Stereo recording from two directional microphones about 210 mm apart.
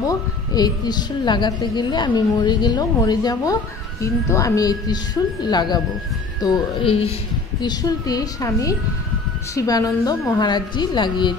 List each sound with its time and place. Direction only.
0.0 s a woman's voice: 15° left (ahead or behind)